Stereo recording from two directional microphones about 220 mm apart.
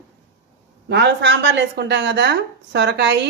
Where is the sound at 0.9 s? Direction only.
50° right (ahead or behind).